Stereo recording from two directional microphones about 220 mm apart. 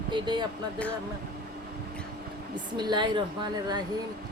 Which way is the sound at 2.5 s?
20° right (ahead or behind).